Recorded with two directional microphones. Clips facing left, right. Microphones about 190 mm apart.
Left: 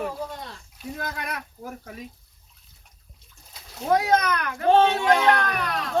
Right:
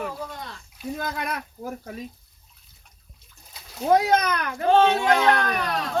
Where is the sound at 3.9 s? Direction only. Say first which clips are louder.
Right 1 dB; 25° right (ahead or behind).